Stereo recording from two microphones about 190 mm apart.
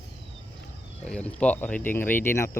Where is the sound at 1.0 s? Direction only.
5° left (ahead or behind).